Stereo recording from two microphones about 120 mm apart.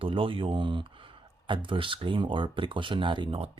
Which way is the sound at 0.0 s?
45° right (ahead or behind).